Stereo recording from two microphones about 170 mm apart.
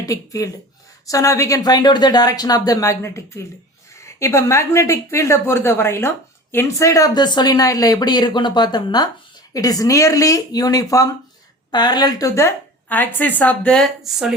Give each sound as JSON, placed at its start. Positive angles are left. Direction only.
{"t": 0.0, "sound": "a woman's voice", "side_deg": 20}